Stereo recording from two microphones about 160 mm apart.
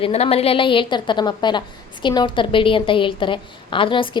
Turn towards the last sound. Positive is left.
turn(degrees=30)  # may be behind; listen again after turning